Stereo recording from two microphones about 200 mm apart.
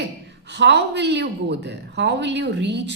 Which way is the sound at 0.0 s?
60° right (ahead or behind).